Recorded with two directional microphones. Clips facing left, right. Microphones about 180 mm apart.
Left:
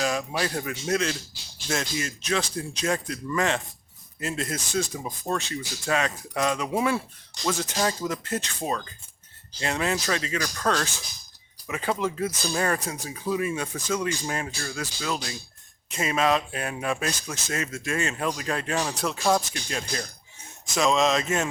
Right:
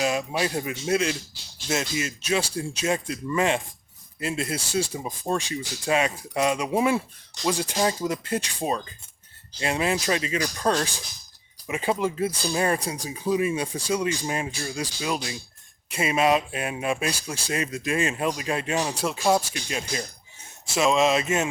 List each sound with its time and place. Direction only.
0.0 s speech: 10° right (ahead or behind)
12.6 s speech: 25° right (ahead or behind); by 21.4 s 10° right (ahead or behind)